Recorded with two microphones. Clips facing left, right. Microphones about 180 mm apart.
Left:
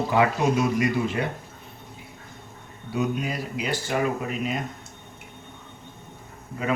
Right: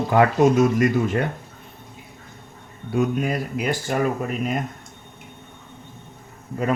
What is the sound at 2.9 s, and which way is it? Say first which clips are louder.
Speech: right 5 dB; 50° right (ahead or behind).